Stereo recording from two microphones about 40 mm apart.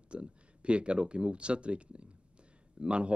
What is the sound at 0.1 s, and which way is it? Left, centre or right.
Speech, right.